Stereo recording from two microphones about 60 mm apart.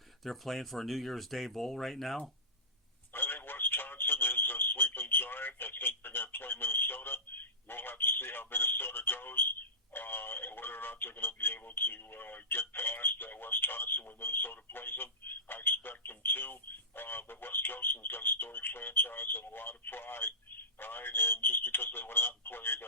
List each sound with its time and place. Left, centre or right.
0.3 s speech: centre
3.1 s a sound: left
4.9 s radio: left
6.0 s speech: left